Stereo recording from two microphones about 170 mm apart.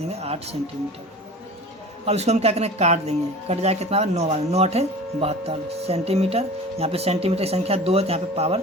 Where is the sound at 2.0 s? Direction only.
40° right (ahead or behind).